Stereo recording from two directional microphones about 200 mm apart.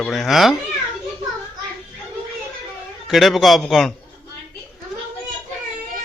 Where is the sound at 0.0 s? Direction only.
Centre (ahead or behind).